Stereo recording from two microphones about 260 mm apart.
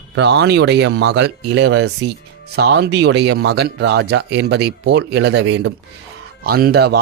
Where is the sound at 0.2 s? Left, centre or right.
Right.